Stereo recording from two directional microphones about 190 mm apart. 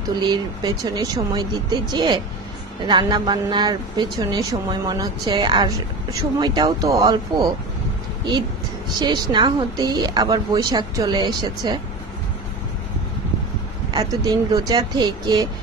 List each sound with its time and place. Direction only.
0.3 s a woman's voice: 20° right (ahead or behind)
9.0 s a woman's voice: 25° right (ahead or behind)
13.9 s a woman's voice: 20° right (ahead or behind)